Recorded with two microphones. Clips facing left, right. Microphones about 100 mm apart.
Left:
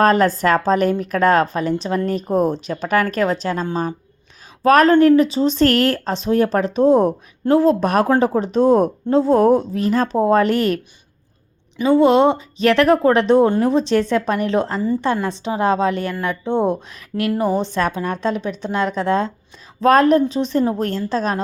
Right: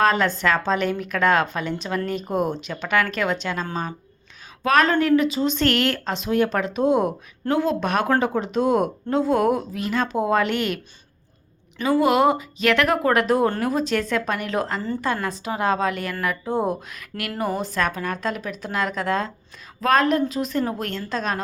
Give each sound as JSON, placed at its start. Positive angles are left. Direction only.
{"t": 0.0, "sound": "speech", "side_deg": 40}
{"t": 11.8, "sound": "speech", "side_deg": 25}